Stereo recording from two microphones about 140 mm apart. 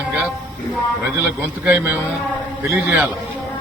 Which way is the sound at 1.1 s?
10° right (ahead or behind).